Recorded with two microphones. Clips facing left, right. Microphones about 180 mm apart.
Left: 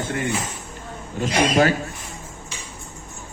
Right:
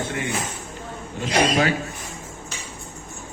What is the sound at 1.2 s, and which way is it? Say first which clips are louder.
Speech: left 2 dB; 40° left (ahead or behind).